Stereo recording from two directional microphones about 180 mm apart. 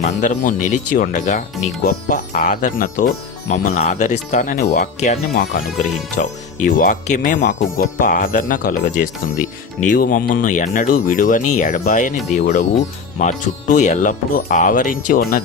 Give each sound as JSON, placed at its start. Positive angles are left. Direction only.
{"t": 0.0, "sound": "speech", "side_deg": 45}